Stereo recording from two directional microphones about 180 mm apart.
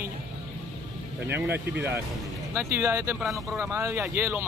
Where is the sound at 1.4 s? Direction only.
10° right (ahead or behind).